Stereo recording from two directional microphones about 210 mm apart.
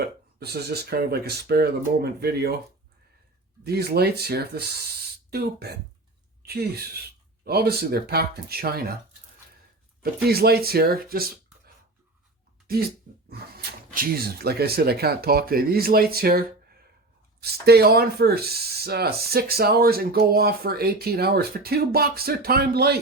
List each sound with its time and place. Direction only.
0.3 s speech: 50° right (ahead or behind)
3.6 s a woman's voice: 50° right (ahead or behind)
10.2 s speech: 50° right (ahead or behind)
13.3 s speech: 50° right (ahead or behind)
17.4 s speech: 50° right (ahead or behind)